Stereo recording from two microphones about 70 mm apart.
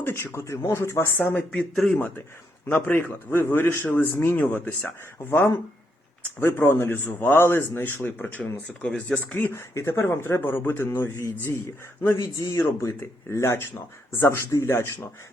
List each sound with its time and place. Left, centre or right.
0.0 s speech: left
1.8 s speech: centre
2.6 s speech: left
8.8 s speech: centre
9.5 s speech: left
12.1 s speech: left